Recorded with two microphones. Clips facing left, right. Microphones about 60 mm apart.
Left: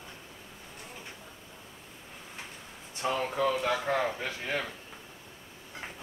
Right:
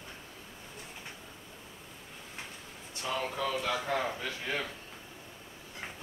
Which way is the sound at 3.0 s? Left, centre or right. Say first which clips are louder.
Left 5 dB; left.